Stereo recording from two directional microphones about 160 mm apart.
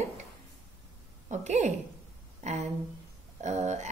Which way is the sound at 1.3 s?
45° right (ahead or behind).